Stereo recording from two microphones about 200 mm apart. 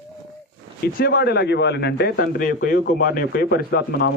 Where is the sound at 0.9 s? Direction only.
50° left (ahead or behind).